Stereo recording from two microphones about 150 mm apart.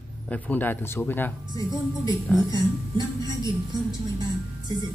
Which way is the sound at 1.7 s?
25° right (ahead or behind).